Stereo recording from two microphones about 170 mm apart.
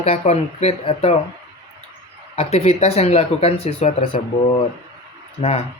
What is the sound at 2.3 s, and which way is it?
Speech, 40° left (ahead or behind).